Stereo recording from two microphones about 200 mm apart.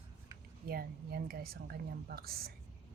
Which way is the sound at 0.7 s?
50° right (ahead or behind).